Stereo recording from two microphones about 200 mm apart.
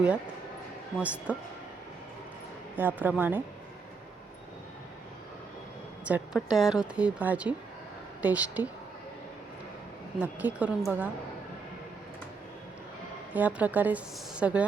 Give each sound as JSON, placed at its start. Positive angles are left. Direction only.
{"t": 0.9, "sound": "a woman's voice", "side_deg": -5}
{"t": 2.7, "sound": "a woman's voice", "side_deg": -10}
{"t": 6.1, "sound": "a woman's voice", "side_deg": -5}
{"t": 10.2, "sound": "a woman's voice", "side_deg": -10}
{"t": 13.3, "sound": "a woman's voice", "side_deg": -10}